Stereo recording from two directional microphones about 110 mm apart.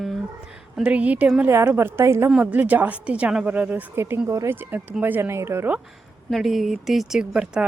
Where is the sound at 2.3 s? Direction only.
10° right (ahead or behind).